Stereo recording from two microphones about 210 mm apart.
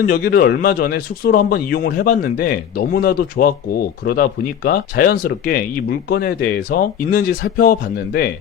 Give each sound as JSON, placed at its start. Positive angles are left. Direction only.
{"t": 0.0, "sound": "speech", "side_deg": 45}